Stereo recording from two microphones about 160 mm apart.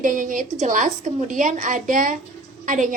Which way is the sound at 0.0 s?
55° right (ahead or behind).